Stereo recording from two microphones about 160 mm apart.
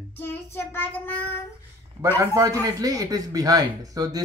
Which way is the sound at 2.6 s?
20° right (ahead or behind).